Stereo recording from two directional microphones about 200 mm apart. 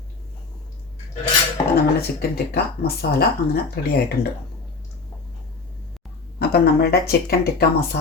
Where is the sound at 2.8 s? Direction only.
50° left (ahead or behind).